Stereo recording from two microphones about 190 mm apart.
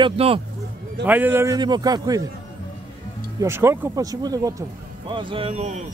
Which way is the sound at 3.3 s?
15° right (ahead or behind).